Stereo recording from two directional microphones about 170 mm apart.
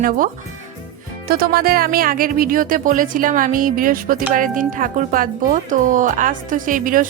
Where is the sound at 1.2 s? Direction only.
60° right (ahead or behind).